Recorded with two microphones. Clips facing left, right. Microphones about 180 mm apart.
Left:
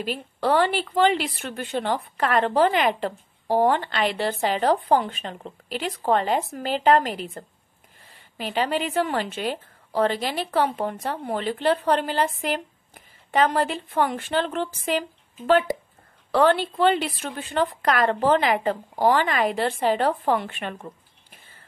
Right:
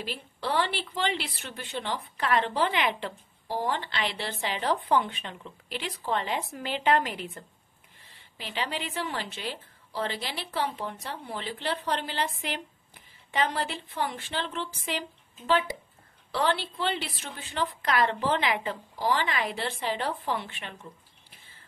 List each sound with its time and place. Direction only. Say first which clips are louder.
0.0 s a woman's voice: left 9 dB; 50° left (ahead or behind)